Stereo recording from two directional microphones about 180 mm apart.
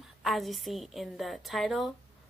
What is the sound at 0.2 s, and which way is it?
A woman's voice, centre (ahead or behind).